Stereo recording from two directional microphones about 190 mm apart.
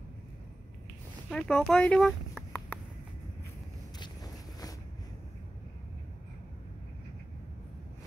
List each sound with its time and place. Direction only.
1.3 s speech: 5° left (ahead or behind)
4.0 s vehicle: 20° left (ahead or behind)